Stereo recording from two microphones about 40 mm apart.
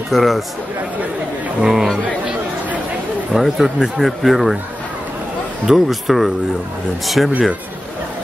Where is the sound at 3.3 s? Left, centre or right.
Centre.